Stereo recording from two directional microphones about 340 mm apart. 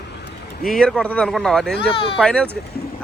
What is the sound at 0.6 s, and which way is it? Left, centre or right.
Speech, centre.